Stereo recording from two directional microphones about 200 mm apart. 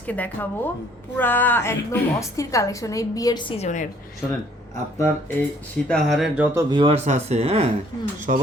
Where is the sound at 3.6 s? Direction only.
35° left (ahead or behind).